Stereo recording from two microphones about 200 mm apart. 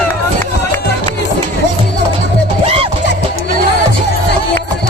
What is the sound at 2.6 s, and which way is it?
Music, 30° right (ahead or behind).